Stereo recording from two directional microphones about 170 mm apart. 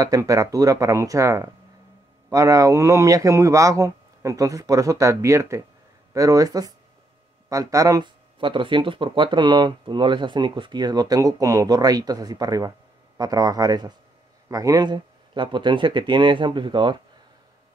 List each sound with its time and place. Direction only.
0.0 s speech: 20° right (ahead or behind)